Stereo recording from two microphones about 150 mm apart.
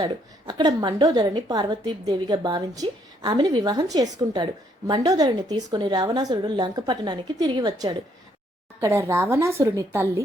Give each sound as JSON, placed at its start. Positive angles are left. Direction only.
{"t": 0.0, "sound": "a woman's voice", "side_deg": -30}
{"t": 8.8, "sound": "a woman's voice", "side_deg": -15}